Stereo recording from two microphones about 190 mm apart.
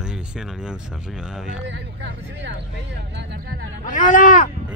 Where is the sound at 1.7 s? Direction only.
70° right (ahead or behind).